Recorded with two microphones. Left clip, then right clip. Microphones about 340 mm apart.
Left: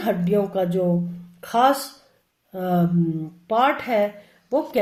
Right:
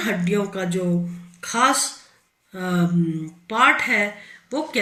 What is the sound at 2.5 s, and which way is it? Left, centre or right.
Speech, centre.